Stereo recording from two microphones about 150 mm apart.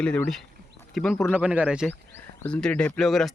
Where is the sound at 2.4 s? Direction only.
5° left (ahead or behind).